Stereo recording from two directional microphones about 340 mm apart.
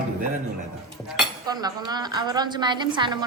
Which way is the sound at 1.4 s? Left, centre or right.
Centre.